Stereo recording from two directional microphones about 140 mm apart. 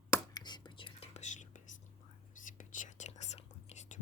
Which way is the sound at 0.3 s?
30° left (ahead or behind).